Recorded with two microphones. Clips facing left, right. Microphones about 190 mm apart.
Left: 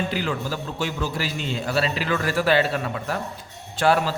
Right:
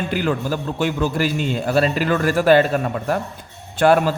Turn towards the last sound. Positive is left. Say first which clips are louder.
# right 5 dB
turn(degrees=-55)  # may be behind; listen again after turning